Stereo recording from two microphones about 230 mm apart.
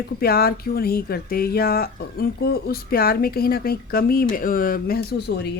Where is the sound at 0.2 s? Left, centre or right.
Left.